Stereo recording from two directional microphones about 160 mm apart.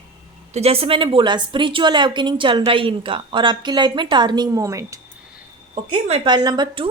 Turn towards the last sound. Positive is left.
turn(degrees=-25)  # may be behind; listen again after turning